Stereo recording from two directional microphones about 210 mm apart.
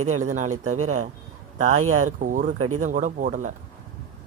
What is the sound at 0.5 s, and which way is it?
Speech, 90° right.